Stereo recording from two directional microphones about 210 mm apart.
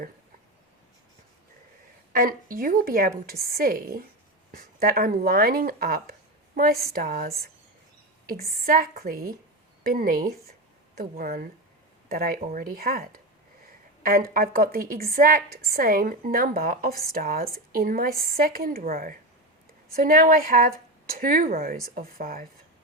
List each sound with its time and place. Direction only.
2.1 s a woman's voice: 45° right (ahead or behind)